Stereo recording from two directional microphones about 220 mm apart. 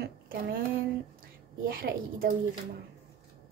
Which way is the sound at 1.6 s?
40° right (ahead or behind).